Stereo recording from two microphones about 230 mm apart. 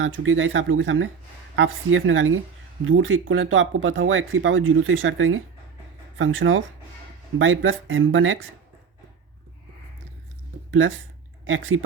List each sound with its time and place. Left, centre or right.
0.0 s speech: right
10.7 s speech: right